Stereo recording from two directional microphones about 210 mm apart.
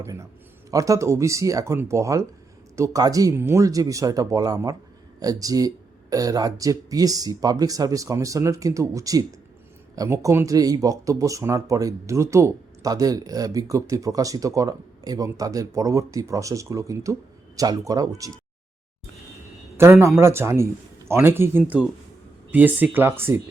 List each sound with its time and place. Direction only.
0.0 s speech: 15° right (ahead or behind)
19.7 s speech: 10° right (ahead or behind)